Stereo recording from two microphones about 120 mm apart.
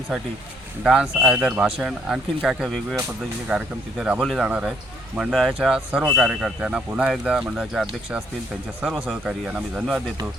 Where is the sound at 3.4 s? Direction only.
5° right (ahead or behind).